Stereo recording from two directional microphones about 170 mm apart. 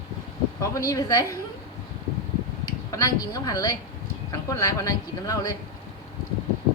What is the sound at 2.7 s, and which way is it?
Speech, 20° left (ahead or behind).